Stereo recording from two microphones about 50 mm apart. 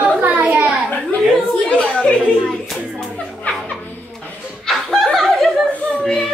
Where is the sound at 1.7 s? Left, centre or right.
Left.